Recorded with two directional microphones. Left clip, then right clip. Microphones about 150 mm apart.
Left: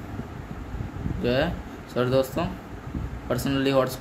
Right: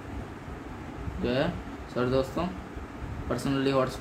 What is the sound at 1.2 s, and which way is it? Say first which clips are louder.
Speech: left 4 dB; 40° left (ahead or behind).